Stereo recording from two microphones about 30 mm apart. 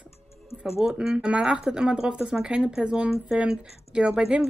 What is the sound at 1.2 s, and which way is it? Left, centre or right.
Speech, right.